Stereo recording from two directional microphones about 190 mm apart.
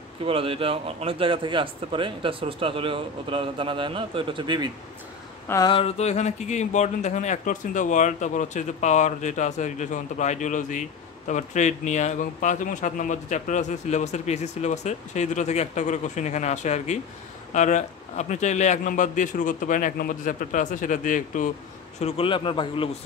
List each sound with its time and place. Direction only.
0.2 s a man's voice: 30° right (ahead or behind)
5.5 s speech: 20° left (ahead or behind); by 21.5 s 40° left (ahead or behind)
22.0 s a man's voice: 30° left (ahead or behind)